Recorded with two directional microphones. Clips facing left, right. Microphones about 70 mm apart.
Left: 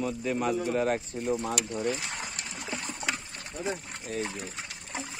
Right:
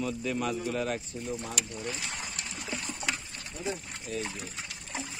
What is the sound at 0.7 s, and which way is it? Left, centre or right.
Speech, left.